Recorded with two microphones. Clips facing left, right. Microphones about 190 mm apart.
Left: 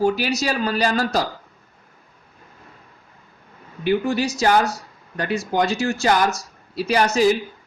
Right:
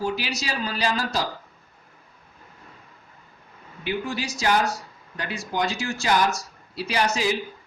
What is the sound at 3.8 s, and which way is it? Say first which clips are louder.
Speech: left 8 dB; 50° left (ahead or behind).